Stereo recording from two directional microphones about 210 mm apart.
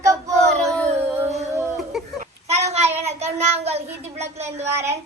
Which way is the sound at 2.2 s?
30° right (ahead or behind).